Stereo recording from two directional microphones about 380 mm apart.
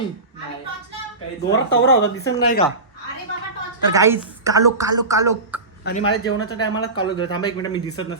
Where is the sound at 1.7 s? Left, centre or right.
Left.